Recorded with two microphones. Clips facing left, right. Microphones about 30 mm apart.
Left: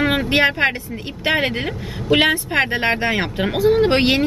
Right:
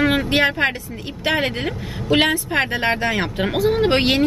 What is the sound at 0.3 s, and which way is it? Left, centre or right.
Speech, centre.